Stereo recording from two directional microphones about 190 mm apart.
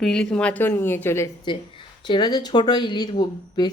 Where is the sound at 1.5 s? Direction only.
25° left (ahead or behind).